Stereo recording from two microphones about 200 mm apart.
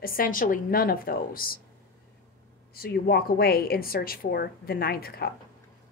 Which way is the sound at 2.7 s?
50° left (ahead or behind).